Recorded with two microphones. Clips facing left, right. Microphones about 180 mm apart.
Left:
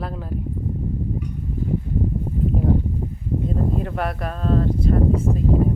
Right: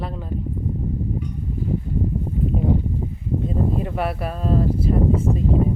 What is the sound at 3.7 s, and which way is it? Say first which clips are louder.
Speech: right 1 dB; 5° right (ahead or behind).